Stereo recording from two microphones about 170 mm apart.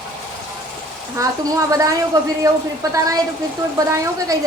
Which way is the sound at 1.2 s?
20° right (ahead or behind).